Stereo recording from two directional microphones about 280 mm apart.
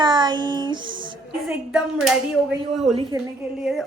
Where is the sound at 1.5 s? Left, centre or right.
Centre.